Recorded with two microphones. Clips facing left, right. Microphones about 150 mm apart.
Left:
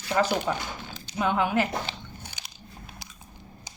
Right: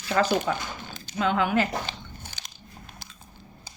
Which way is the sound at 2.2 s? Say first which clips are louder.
Even; 15° left (ahead or behind).